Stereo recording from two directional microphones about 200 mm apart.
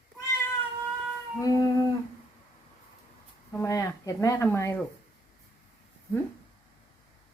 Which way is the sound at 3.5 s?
15° left (ahead or behind).